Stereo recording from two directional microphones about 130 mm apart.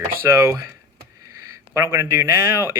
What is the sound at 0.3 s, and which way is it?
Speech, 20° right (ahead or behind).